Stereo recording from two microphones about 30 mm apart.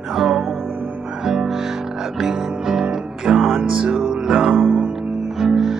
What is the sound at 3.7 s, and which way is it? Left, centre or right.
Music, right.